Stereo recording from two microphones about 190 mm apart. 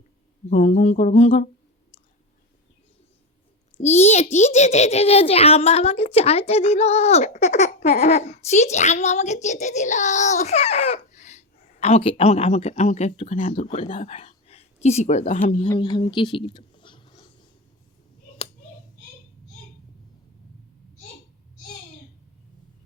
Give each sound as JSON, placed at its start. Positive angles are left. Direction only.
{"t": 0.5, "sound": "speech", "side_deg": 35}
{"t": 3.8, "sound": "speech", "side_deg": 35}
{"t": 15.8, "sound": "a sound", "side_deg": 25}